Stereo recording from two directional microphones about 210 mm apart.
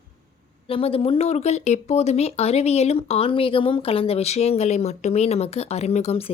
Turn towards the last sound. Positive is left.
turn(degrees=30)  # may be behind; listen again after turning